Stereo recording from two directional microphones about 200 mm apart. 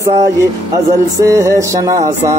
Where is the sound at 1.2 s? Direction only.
15° right (ahead or behind).